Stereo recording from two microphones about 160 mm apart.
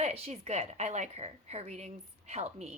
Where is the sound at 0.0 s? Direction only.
40° right (ahead or behind).